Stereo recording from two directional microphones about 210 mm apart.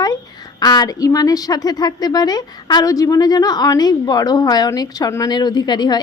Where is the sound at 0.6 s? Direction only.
20° left (ahead or behind).